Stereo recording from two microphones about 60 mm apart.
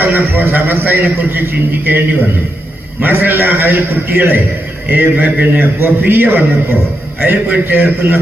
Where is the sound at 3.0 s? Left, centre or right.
Right.